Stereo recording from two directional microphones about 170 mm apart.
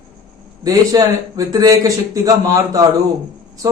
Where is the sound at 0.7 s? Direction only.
20° right (ahead or behind).